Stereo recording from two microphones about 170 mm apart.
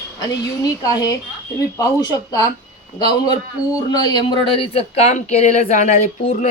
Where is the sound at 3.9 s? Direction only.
25° left (ahead or behind).